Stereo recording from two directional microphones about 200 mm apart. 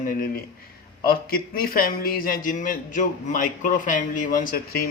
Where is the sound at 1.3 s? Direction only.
45° left (ahead or behind).